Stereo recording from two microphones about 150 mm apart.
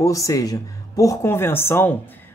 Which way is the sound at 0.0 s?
20° left (ahead or behind).